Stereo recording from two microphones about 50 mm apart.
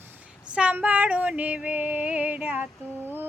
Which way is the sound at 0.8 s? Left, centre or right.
Right.